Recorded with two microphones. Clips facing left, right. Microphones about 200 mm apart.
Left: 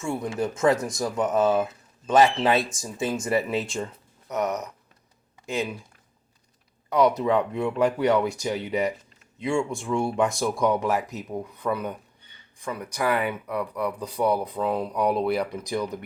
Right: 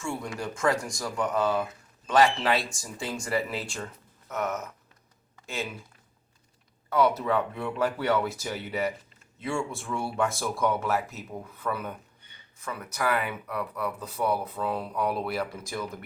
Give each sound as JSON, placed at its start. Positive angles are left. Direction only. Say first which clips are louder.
{"t": 0.0, "sound": "speech", "louder": "left 6 dB", "side_deg": 20}
{"t": 5.4, "sound": "a sound", "louder": "left 6 dB", "side_deg": 15}
{"t": 6.9, "sound": "speech", "louder": "left 4 dB", "side_deg": 15}